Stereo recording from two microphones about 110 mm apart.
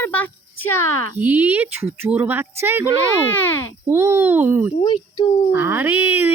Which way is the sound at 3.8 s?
25° right (ahead or behind).